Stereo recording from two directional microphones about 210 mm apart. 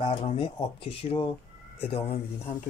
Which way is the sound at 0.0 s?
25° left (ahead or behind).